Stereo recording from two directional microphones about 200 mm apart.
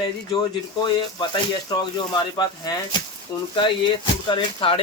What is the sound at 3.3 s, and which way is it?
A man's voice, 20° left (ahead or behind).